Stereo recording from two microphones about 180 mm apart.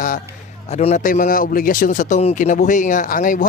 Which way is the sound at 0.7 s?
35° left (ahead or behind).